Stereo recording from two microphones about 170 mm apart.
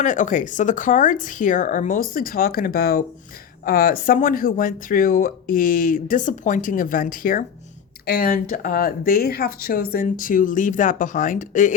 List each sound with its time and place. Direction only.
0.0 s speech: 50° left (ahead or behind)
8.0 s speech: 65° left (ahead or behind); by 11.7 s 50° left (ahead or behind)